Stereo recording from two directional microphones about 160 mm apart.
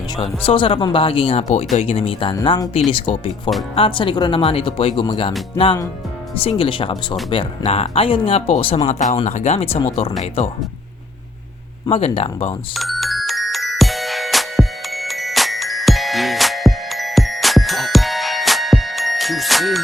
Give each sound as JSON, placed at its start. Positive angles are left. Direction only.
{"t": 0.2, "sound": "speech", "side_deg": 30}
{"t": 6.3, "sound": "speech", "side_deg": 35}
{"t": 11.9, "sound": "speech", "side_deg": 40}
{"t": 12.7, "sound": "music", "side_deg": 0}